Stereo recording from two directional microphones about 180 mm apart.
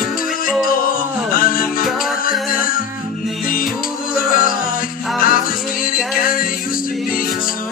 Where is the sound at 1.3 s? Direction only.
50° left (ahead or behind).